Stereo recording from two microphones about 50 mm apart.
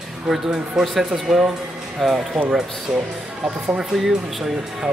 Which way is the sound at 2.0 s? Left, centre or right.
Centre.